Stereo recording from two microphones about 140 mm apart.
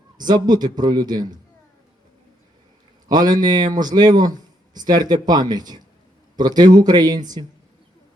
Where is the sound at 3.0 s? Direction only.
30° right (ahead or behind).